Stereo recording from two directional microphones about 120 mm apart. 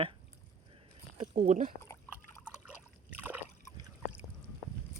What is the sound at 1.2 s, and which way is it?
Speech, 90° right.